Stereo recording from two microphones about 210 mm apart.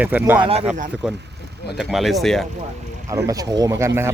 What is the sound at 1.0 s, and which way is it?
Speech, centre (ahead or behind).